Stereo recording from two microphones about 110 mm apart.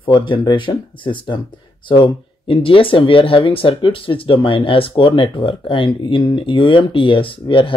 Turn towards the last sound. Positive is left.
turn(degrees=50)  # may be behind; listen again after turning